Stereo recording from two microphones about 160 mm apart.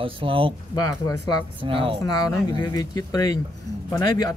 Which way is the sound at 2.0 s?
25° left (ahead or behind).